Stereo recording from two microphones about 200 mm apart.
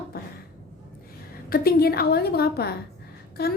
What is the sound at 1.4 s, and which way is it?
A woman's voice, 50° left (ahead or behind).